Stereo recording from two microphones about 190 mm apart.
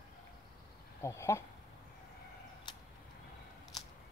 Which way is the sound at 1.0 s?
15° left (ahead or behind).